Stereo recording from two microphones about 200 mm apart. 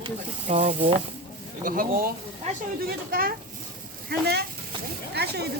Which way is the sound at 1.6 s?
45° right (ahead or behind).